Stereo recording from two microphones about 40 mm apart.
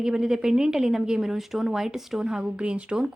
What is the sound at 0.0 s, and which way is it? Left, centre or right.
A woman's voice, centre.